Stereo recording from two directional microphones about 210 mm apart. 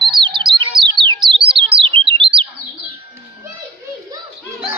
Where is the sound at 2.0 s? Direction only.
25° right (ahead or behind).